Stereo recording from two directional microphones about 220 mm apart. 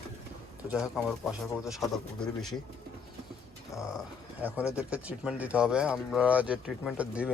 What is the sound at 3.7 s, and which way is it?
Speech, 15° left (ahead or behind).